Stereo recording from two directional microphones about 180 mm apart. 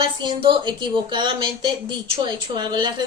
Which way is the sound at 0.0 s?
25° right (ahead or behind).